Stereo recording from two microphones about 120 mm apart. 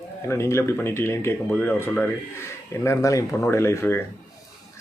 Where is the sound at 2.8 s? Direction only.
25° left (ahead or behind).